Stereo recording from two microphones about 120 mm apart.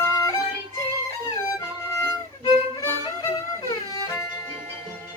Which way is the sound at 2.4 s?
30° left (ahead or behind).